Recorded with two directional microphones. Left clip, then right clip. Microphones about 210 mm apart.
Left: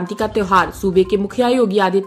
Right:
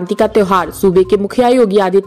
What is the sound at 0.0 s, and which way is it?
A woman's voice, 35° right (ahead or behind).